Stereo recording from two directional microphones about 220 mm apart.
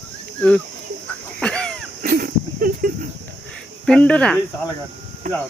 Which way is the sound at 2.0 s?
40° right (ahead or behind).